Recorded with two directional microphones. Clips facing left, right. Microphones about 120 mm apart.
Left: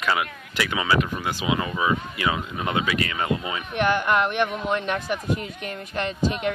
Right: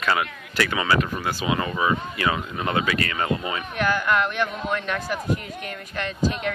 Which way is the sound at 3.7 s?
20° left (ahead or behind).